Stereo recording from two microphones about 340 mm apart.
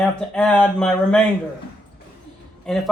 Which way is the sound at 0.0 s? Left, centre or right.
Centre.